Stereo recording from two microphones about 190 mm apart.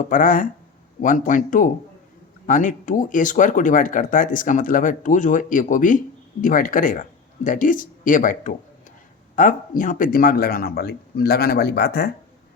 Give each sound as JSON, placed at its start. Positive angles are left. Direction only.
{"t": 0.0, "sound": "speech", "side_deg": 45}